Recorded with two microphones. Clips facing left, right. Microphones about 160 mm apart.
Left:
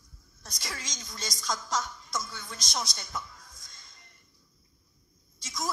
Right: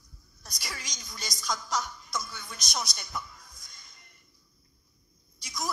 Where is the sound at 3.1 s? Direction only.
20° left (ahead or behind).